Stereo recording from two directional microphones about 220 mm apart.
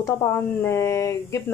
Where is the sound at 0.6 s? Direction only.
10° left (ahead or behind).